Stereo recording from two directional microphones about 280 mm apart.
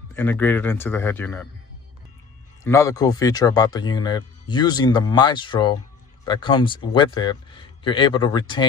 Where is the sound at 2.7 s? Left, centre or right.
Centre.